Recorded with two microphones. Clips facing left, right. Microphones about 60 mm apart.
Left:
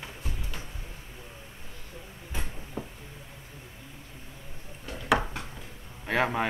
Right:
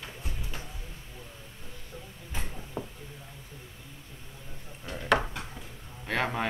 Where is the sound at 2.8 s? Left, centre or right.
Centre.